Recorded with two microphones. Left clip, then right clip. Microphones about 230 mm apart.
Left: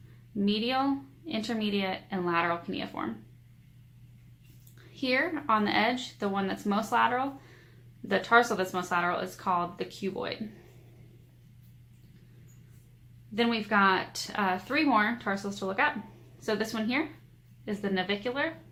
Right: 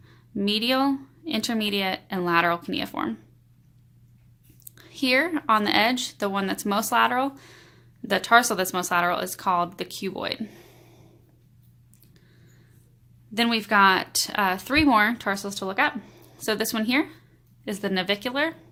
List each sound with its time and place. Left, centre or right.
0.3 s speech: right
4.7 s speech: right
13.3 s speech: right